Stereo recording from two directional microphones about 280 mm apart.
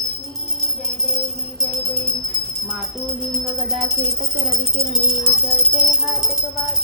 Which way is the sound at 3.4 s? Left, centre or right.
Centre.